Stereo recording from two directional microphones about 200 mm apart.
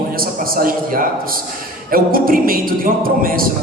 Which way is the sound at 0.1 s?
45° right (ahead or behind).